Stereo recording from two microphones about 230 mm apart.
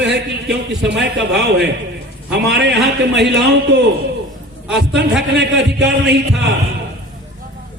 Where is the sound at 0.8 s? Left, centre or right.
Right.